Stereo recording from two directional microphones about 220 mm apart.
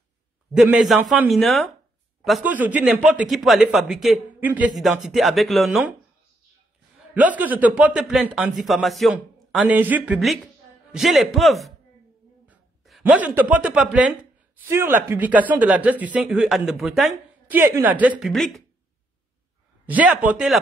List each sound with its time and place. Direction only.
0.5 s a man's voice: centre (ahead or behind)
7.2 s a man's voice: 5° right (ahead or behind)
12.4 s a sound: 5° right (ahead or behind)
13.5 s a man's voice: 5° right (ahead or behind)
19.9 s speech: 5° right (ahead or behind)